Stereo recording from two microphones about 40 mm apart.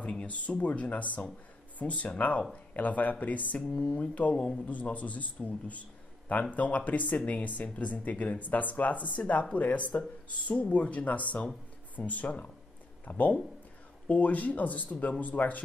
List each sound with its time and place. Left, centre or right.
0.3 s a man's voice: left